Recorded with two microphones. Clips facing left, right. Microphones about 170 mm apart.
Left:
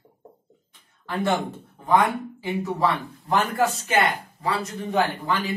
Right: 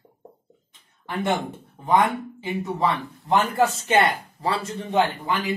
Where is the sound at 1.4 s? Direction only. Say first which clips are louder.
Even; 20° right (ahead or behind).